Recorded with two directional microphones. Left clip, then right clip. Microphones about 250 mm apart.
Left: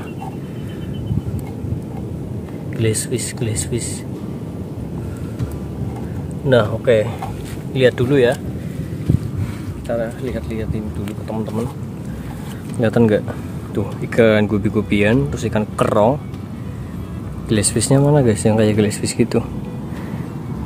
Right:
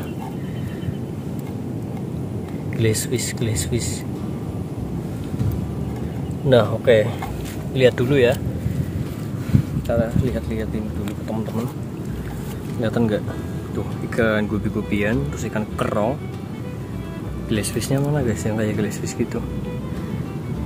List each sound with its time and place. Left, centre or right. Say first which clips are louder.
2.8 s speech: left 1 dB; centre
6.5 s speech: left 1 dB; centre
7.7 s speech: left 2 dB; centre
9.8 s speech: left 1 dB; centre
12.8 s speech: left 7 dB; left
17.5 s speech: left 6 dB; left